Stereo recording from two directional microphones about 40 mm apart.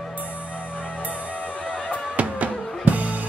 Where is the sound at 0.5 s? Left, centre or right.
Left.